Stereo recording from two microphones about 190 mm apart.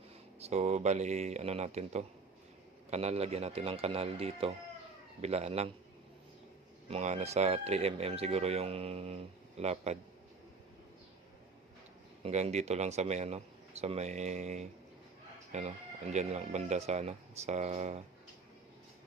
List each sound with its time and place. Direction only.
0.3 s speech: 35° right (ahead or behind)
6.9 s speech: 35° right (ahead or behind)
12.2 s speech: 35° right (ahead or behind)